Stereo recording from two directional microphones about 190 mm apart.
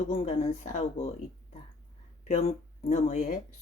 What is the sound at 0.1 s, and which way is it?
Speech, 30° left (ahead or behind).